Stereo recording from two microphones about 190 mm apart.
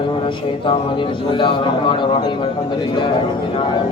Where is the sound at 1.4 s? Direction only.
25° left (ahead or behind).